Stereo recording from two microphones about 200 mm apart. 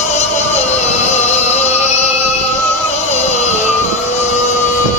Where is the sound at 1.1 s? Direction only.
35° left (ahead or behind).